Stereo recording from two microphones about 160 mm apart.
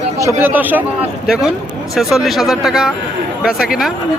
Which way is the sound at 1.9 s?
Centre (ahead or behind).